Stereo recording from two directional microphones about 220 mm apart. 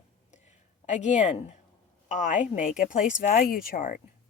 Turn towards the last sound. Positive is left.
turn(degrees=40)  # may be behind; listen again after turning